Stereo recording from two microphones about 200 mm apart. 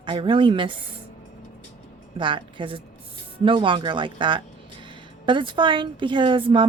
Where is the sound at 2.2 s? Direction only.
25° right (ahead or behind).